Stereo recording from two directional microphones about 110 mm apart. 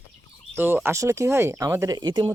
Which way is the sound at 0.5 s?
20° right (ahead or behind).